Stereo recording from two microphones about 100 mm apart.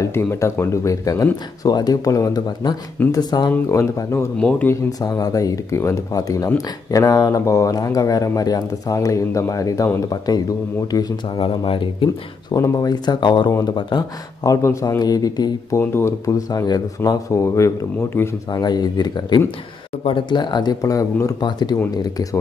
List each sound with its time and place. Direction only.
0.0 s speech: 25° left (ahead or behind); by 3.5 s 40° left (ahead or behind)
3.6 s speech: 30° left (ahead or behind)
4.4 s speech: 10° left (ahead or behind)
5.0 s speech: 35° left (ahead or behind)
11.3 s speech: 60° left (ahead or behind)
12.5 s speech: 35° left (ahead or behind)
15.7 s speech: 25° left (ahead or behind)
16.3 s speech: 35° left (ahead or behind)
18.5 s speech: 40° left (ahead or behind)
20.0 s speech: 60° left (ahead or behind)
20.8 s speech: 35° left (ahead or behind)
21.5 s speech: 45° left (ahead or behind)